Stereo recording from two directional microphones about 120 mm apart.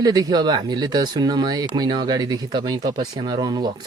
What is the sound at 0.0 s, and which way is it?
Speech, 35° right (ahead or behind).